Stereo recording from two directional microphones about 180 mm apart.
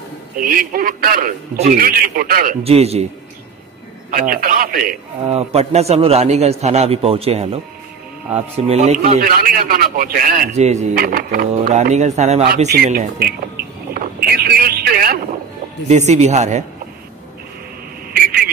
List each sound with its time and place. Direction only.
0.4 s a man's voice: 50° right (ahead or behind)
2.6 s a man's voice: 35° right (ahead or behind)
4.1 s a man's voice: 50° right (ahead or behind)
5.2 s a man's voice: 35° right (ahead or behind)
9.1 s a man's voice: 55° right (ahead or behind)
11.0 s a man's voice: 55° right (ahead or behind)
12.6 s speech: 55° right (ahead or behind)
13.6 s a sound: 60° right (ahead or behind)
15.9 s a man's voice: 40° right (ahead or behind)